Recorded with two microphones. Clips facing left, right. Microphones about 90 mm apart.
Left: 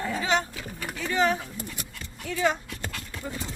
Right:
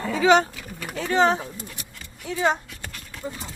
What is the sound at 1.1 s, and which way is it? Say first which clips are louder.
Speech: right 5 dB; 30° right (ahead or behind).